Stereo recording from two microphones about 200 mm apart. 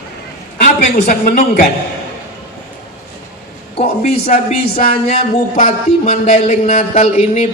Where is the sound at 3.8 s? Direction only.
35° left (ahead or behind).